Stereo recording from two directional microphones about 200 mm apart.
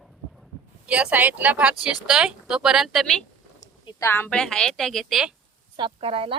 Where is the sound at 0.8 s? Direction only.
5° right (ahead or behind).